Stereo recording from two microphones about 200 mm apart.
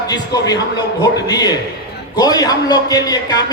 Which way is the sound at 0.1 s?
20° left (ahead or behind).